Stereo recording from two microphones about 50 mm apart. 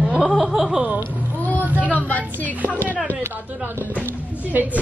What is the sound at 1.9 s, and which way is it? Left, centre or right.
Speech, left.